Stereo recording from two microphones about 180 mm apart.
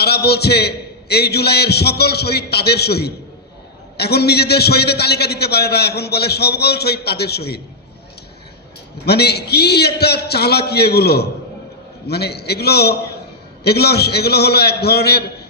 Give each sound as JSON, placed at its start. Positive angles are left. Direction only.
{"t": 0.0, "sound": "a man's voice", "side_deg": 65}
{"t": 9.0, "sound": "a man's voice", "side_deg": 65}